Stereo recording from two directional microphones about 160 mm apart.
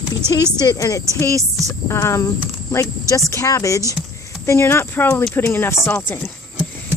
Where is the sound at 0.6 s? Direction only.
25° left (ahead or behind).